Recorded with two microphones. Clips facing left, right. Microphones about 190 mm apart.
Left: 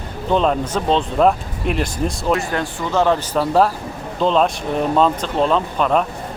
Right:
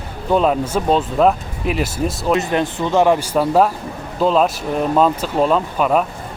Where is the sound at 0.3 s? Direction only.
5° right (ahead or behind).